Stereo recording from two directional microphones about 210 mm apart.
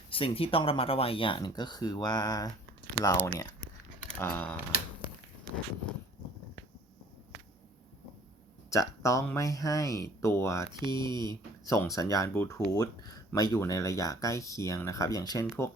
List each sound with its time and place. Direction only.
0.1 s speech: 25° left (ahead or behind)
4.1 s a sound: 10° left (ahead or behind)
8.7 s speech: 15° left (ahead or behind)
10.7 s speech: 20° right (ahead or behind)
11.7 s speech: 15° left (ahead or behind)